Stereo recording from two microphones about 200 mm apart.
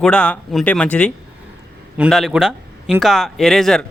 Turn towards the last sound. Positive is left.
turn(degrees=0)  # may be behind; listen again after turning